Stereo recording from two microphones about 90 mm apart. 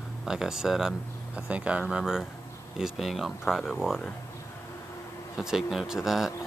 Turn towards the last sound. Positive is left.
turn(degrees=-5)  # may be behind; listen again after turning